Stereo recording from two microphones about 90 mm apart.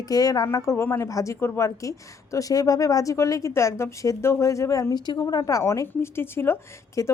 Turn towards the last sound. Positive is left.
turn(degrees=30)  # may be behind; listen again after turning